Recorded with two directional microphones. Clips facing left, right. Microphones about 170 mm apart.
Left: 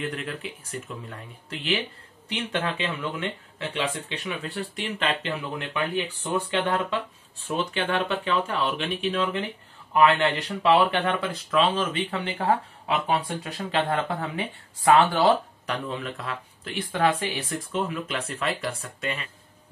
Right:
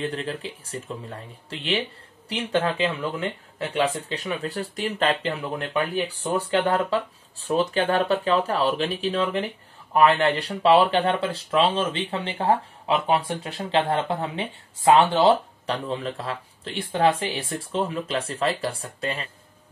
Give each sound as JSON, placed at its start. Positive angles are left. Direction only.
{"t": 0.0, "sound": "speech", "side_deg": -30}